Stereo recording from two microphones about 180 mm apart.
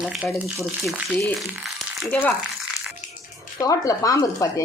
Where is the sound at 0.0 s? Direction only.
5° right (ahead or behind).